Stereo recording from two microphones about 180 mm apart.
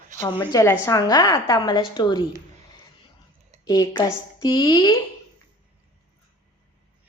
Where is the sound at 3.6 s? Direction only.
20° left (ahead or behind).